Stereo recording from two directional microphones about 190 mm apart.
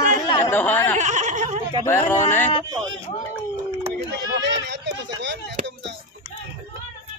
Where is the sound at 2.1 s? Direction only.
10° left (ahead or behind).